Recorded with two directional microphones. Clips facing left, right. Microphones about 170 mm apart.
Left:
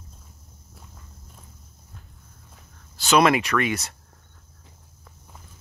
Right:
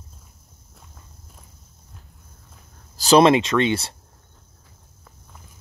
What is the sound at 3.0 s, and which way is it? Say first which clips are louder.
Speech: right 5 dB; 30° right (ahead or behind).